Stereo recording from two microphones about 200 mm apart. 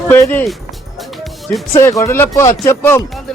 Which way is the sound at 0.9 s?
Centre (ahead or behind).